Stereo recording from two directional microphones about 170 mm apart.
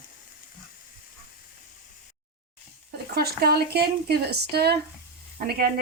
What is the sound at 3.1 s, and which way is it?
Speech, 65° right (ahead or behind).